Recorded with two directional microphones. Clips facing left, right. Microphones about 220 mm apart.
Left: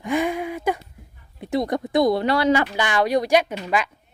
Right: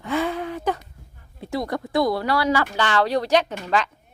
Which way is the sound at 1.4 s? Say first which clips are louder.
Left 4 dB; 20° left (ahead or behind).